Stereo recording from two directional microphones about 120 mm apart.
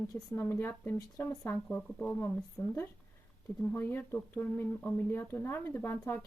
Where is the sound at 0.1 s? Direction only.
20° left (ahead or behind).